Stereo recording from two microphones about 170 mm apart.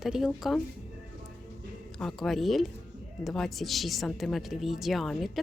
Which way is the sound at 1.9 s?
Centre (ahead or behind).